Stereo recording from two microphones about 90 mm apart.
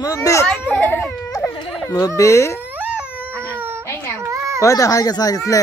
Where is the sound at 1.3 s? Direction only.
40° left (ahead or behind).